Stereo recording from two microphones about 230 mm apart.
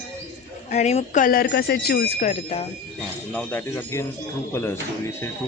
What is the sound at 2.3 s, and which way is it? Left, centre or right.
Speech, left.